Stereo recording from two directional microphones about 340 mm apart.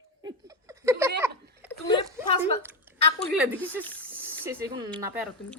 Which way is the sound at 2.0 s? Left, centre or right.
Centre.